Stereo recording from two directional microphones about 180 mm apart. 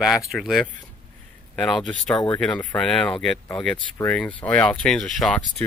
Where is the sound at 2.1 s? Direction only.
25° left (ahead or behind).